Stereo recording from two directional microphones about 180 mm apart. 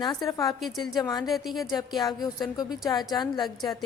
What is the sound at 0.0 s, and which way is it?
A woman's voice, 20° left (ahead or behind).